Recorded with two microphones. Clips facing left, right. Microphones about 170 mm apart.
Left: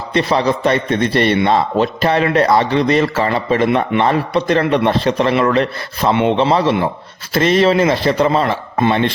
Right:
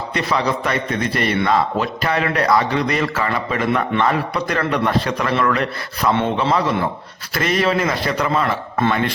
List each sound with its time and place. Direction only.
0.1 s a man's voice: 25° left (ahead or behind)